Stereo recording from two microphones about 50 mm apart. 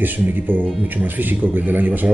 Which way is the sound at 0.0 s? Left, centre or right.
Right.